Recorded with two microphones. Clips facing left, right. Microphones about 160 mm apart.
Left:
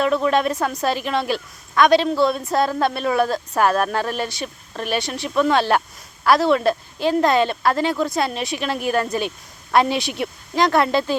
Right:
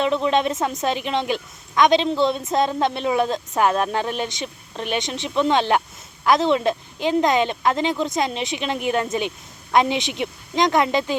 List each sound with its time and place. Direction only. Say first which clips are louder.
0.0 s speech: left 1 dB; 25° right (ahead or behind)